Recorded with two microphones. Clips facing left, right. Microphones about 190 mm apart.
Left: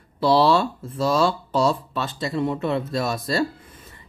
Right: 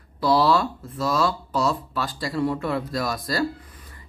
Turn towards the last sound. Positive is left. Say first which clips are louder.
# left 2 dB
turn(degrees=25)  # may be behind; listen again after turning